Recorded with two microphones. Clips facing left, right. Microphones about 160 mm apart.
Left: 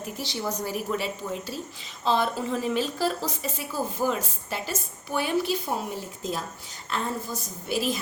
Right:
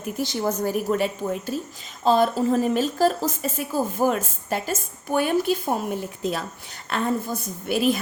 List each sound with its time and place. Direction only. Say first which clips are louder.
0.2 s a woman's voice: right 7 dB; 50° right (ahead or behind)